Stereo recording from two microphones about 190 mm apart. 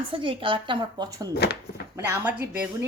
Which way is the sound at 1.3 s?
60° left (ahead or behind).